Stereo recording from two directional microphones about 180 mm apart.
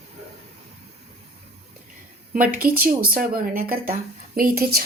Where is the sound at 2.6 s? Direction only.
55° right (ahead or behind).